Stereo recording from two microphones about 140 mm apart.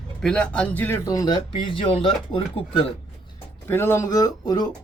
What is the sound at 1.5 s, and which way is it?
Speech, 40° left (ahead or behind).